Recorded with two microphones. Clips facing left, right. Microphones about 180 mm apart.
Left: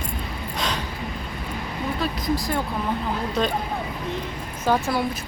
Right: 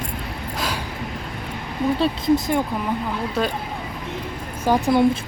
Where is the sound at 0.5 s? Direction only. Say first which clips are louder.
Even; 5° right (ahead or behind).